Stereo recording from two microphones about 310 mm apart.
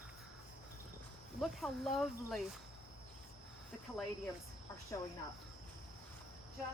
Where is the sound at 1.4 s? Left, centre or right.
Centre.